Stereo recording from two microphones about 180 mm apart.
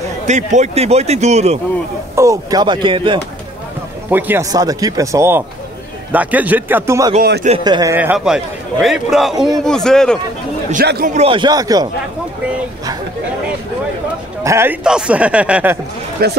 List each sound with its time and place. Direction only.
0.3 s a man's voice: 40° right (ahead or behind)
2.1 s speech: 20° right (ahead or behind)
4.1 s speech: 15° right (ahead or behind)
7.2 s speech: 65° right (ahead or behind)
7.6 s a man's voice: 20° right (ahead or behind); by 10.1 s 5° left (ahead or behind)
10.9 s speech: 55° right (ahead or behind)
11.1 s speech: 30° right (ahead or behind)
14.4 s speech: 15° right (ahead or behind)
16.2 s speech: 60° right (ahead or behind)